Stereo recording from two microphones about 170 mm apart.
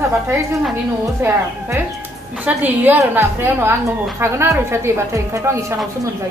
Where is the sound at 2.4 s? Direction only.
10° right (ahead or behind).